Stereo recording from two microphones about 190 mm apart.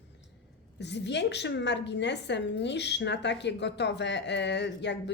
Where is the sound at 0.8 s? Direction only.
65° left (ahead or behind).